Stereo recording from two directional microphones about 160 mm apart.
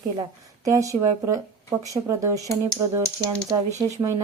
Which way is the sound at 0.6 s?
20° right (ahead or behind).